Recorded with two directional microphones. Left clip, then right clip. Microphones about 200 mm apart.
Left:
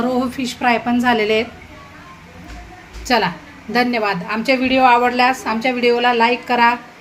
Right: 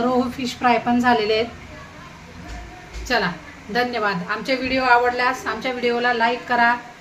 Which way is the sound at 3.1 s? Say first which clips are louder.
Left 4 dB; 35° left (ahead or behind).